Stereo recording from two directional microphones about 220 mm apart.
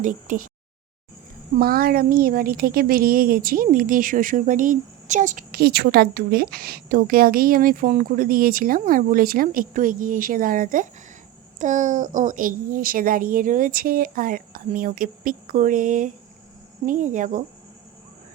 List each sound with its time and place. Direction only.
0.0 s a woman's voice: 35° right (ahead or behind)
1.5 s a woman's voice: 45° right (ahead or behind)